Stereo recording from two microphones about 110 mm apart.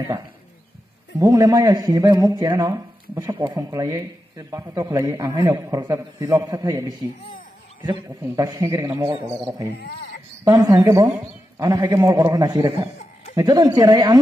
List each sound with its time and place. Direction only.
1.2 s a man's voice: 35° right (ahead or behind)
8.4 s a man's voice: 30° right (ahead or behind)
10.5 s a man's voice: 30° right (ahead or behind)